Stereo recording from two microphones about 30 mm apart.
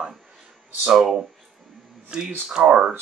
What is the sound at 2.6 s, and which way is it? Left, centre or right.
Speech, right.